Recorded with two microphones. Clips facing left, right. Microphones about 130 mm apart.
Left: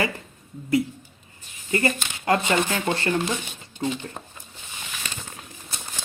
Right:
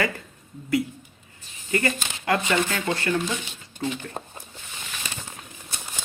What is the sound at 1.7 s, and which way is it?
Speech, 30° left (ahead or behind).